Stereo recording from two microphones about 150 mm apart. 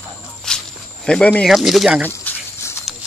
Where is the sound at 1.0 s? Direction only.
5° left (ahead or behind).